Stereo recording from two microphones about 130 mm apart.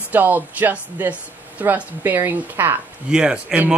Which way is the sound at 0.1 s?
15° right (ahead or behind).